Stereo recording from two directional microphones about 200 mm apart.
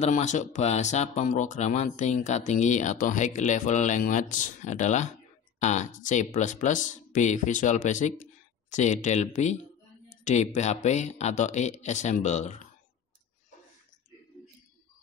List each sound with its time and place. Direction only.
0.0 s speech: 35° left (ahead or behind)